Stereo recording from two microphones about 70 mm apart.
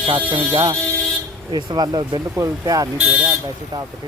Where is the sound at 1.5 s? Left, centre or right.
Right.